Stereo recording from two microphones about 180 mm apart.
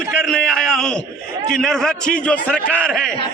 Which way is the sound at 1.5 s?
5° left (ahead or behind).